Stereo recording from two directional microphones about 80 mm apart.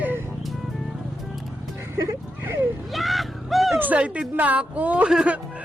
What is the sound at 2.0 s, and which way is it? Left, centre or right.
Vehicle, right.